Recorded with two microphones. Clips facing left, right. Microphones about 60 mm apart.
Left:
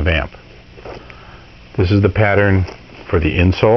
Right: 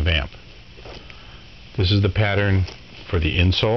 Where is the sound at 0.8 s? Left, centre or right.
Left.